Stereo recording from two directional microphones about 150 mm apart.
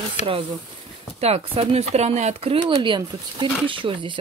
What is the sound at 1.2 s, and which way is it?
Speech, 45° right (ahead or behind).